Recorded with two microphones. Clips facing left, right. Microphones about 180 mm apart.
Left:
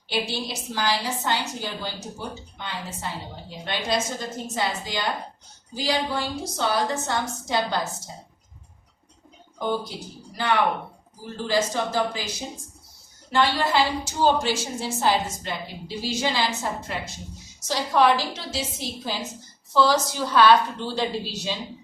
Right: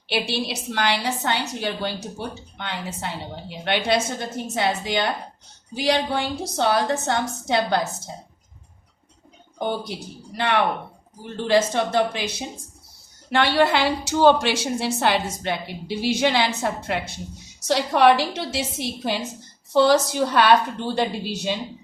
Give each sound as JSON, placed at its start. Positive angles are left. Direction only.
{"t": 0.1, "sound": "a woman's voice", "side_deg": -70}
{"t": 10.3, "sound": "a woman's voice", "side_deg": -70}
{"t": 13.3, "sound": "a woman's voice", "side_deg": -70}